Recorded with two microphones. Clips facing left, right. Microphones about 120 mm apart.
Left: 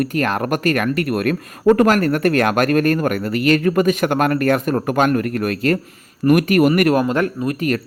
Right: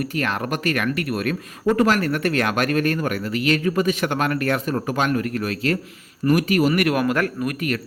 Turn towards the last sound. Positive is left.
turn(degrees=25)  # may be behind; listen again after turning